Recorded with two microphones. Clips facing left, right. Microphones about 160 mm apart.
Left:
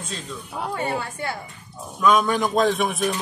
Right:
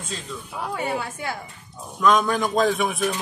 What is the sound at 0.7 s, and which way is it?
A man's voice, 5° right (ahead or behind).